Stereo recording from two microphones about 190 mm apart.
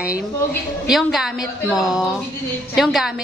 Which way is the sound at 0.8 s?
Centre (ahead or behind).